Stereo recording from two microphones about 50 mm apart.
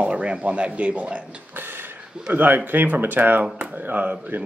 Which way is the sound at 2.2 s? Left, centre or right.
Right.